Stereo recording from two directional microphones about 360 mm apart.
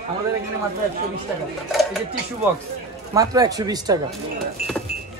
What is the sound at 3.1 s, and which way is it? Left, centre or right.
Speech, centre.